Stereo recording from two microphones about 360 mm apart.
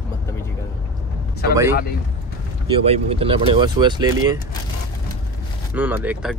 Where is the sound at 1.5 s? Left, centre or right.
Centre.